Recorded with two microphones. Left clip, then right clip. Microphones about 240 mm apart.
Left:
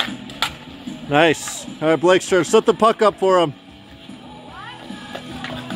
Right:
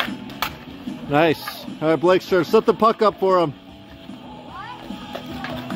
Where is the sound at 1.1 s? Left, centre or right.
Centre.